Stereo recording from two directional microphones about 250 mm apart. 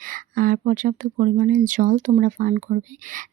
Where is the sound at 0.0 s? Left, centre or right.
Right.